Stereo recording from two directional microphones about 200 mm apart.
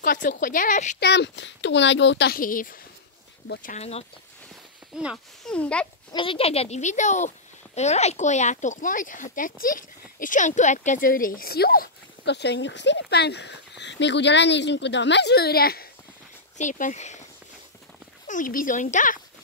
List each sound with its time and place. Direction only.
0.0 s speech: 45° left (ahead or behind)
0.9 s speech: 55° left (ahead or behind); by 4.0 s 35° left (ahead or behind)
4.9 s a child's voice: centre (ahead or behind)
6.1 s speech: 25° left (ahead or behind); by 15.9 s 50° left (ahead or behind)
16.5 s speech: 40° left (ahead or behind)
18.2 s speech: 40° left (ahead or behind)